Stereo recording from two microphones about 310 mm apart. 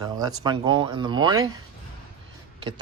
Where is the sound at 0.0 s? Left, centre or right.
Centre.